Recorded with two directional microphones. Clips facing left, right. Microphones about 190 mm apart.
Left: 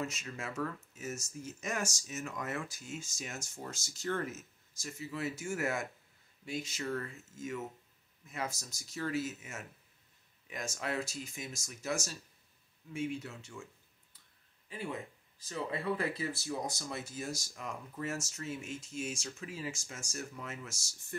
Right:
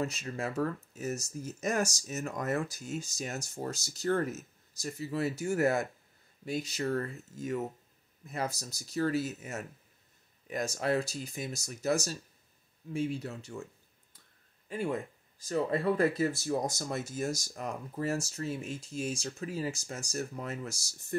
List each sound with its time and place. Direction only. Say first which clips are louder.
0.0 s speech: right 6 dB; 35° right (ahead or behind)
14.7 s speech: right 7 dB; 45° right (ahead or behind)